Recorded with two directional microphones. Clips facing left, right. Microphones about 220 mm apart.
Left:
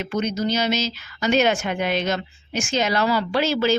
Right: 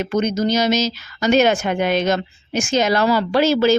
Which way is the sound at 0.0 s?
45° right (ahead or behind).